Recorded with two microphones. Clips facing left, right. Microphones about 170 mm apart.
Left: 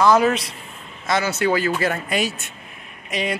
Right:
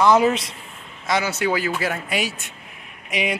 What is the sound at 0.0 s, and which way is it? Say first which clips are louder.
A man's voice: even; 20° right (ahead or behind).